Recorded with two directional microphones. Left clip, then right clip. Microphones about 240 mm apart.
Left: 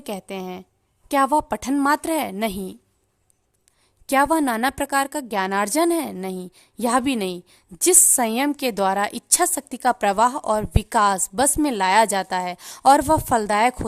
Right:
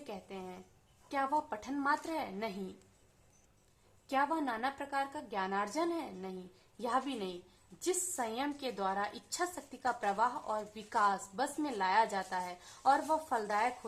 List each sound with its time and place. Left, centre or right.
0.0 s a woman's voice: left
4.1 s a woman's voice: left